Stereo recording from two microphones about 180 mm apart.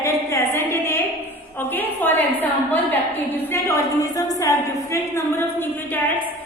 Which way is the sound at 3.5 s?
15° left (ahead or behind).